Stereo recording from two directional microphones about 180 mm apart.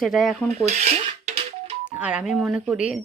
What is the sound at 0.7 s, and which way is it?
Dishes, 35° right (ahead or behind).